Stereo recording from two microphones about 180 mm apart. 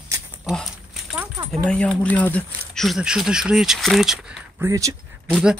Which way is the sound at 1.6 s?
5° left (ahead or behind).